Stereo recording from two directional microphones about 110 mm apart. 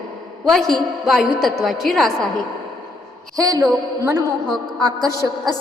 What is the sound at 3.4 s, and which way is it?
Speech, 30° right (ahead or behind).